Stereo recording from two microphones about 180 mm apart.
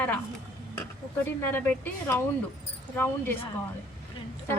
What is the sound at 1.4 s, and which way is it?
A woman's voice, 10° left (ahead or behind).